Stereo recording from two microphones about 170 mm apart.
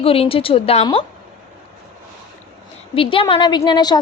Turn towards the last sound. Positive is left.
turn(degrees=25)  # may be behind; listen again after turning